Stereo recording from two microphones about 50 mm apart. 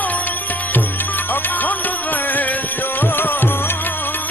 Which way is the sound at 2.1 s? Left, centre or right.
Left.